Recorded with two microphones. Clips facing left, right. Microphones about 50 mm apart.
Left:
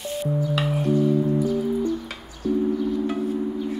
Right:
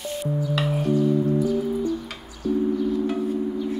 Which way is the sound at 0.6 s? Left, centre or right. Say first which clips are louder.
Right 1 dB; centre.